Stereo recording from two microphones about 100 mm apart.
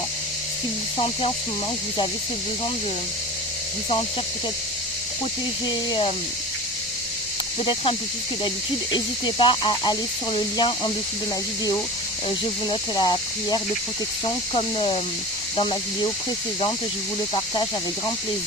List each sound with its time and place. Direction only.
0.9 s snake: 90° left
7.6 s speech: 65° left (ahead or behind)
13.0 s speech: 50° left (ahead or behind)
14.3 s speech: 65° left (ahead or behind)
17.3 s speech: 55° left (ahead or behind)